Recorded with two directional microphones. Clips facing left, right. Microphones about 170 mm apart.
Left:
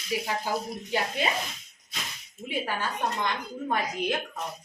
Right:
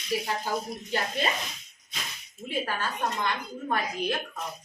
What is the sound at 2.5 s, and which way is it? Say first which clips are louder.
A woman's voice: even; 15° left (ahead or behind).